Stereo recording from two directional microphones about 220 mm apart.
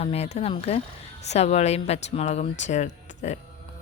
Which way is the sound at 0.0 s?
30° left (ahead or behind).